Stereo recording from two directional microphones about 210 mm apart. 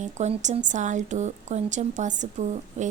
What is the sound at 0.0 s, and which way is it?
A woman's voice, 35° right (ahead or behind).